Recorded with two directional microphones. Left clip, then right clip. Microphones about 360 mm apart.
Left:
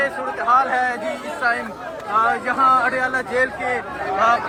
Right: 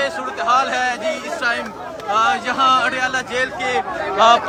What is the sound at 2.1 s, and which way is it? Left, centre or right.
Speech, centre.